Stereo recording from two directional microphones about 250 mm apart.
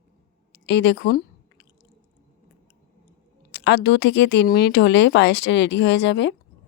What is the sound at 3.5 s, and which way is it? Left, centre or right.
Speech, left.